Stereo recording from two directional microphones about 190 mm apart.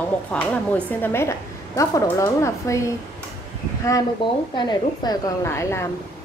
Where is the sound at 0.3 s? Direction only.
5° left (ahead or behind).